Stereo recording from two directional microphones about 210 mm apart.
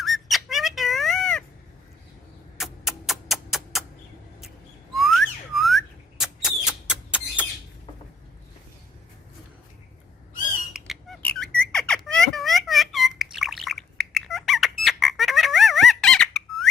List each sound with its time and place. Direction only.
0.0 s squeak: centre (ahead or behind)
2.6 s music: centre (ahead or behind)
4.9 s whistling: centre (ahead or behind)
10.7 s squeak: centre (ahead or behind)